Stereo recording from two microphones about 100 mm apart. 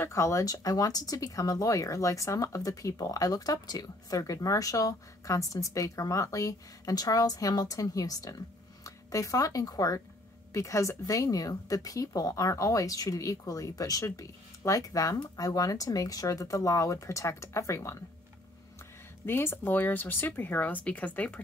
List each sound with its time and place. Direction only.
0.0 s speech: 30° left (ahead or behind)
19.2 s speech: 25° left (ahead or behind)